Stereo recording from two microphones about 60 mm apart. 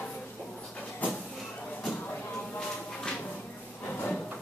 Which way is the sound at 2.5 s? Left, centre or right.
Centre.